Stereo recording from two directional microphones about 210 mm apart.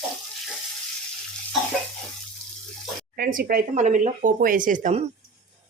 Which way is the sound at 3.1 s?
45° right (ahead or behind).